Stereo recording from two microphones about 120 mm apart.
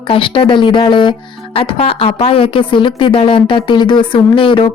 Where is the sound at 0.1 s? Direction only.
45° left (ahead or behind).